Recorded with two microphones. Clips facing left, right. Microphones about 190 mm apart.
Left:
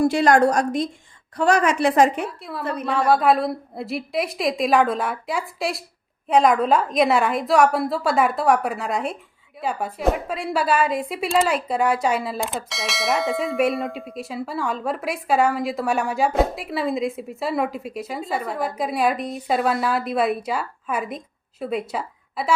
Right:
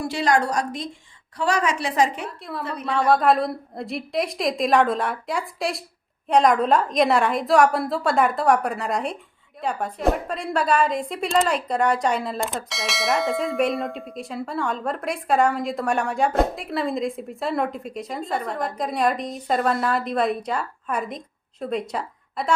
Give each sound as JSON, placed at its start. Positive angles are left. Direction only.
{"t": 0.0, "sound": "a woman's voice", "side_deg": 50}
{"t": 2.2, "sound": "a woman's voice", "side_deg": 0}